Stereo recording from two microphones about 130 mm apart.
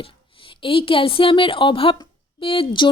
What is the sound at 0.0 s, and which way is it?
A woman's voice, 40° left (ahead or behind).